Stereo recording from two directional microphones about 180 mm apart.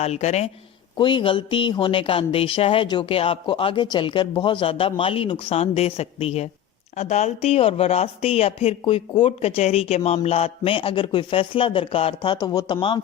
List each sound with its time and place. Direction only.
0.0 s a woman's voice: 35° left (ahead or behind)
0.9 s a woman's voice: 25° left (ahead or behind)